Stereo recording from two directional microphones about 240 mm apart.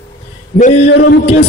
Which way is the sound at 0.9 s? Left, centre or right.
Left.